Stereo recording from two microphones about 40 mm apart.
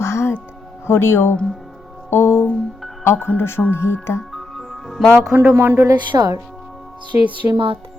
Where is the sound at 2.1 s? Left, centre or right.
Left.